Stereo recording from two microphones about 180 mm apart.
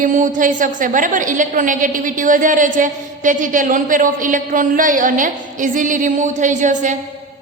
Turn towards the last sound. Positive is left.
turn(degrees=-45)  # may be behind; listen again after turning